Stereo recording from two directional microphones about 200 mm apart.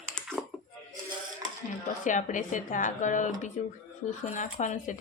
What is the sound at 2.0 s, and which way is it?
Speech, 40° left (ahead or behind).